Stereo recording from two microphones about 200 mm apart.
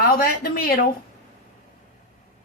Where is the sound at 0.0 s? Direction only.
50° left (ahead or behind).